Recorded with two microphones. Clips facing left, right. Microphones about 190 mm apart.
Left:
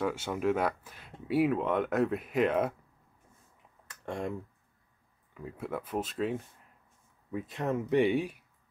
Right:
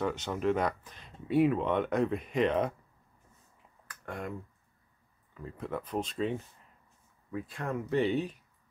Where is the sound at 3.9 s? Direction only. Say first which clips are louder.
Left 4 dB; 25° left (ahead or behind).